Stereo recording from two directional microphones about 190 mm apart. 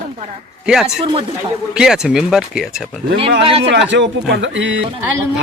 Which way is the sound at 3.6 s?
70° right (ahead or behind).